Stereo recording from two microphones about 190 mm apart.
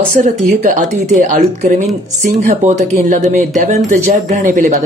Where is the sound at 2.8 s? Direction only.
40° right (ahead or behind).